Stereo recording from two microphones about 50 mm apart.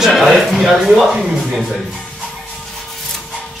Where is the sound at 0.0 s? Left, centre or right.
Centre.